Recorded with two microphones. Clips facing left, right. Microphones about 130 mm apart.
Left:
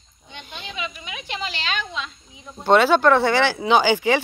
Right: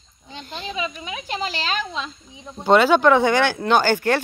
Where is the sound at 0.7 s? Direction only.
35° right (ahead or behind).